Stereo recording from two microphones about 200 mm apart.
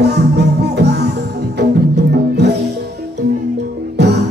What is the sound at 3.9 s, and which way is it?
Music, 55° right (ahead or behind).